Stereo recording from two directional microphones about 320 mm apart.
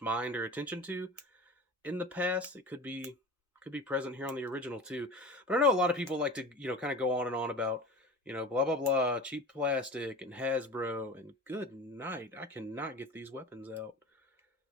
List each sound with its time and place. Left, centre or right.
0.0 s speech: centre